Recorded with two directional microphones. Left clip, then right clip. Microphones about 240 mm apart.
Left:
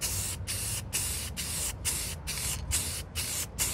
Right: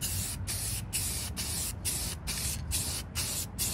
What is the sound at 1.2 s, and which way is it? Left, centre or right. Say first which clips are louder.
Spray: left 1 dB; centre.